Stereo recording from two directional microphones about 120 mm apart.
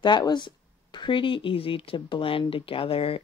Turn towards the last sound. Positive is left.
turn(degrees=50)  # may be behind; listen again after turning